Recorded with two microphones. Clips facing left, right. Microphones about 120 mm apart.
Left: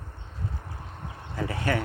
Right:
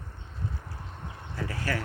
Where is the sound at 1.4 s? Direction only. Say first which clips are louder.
Left 5 dB; 20° left (ahead or behind).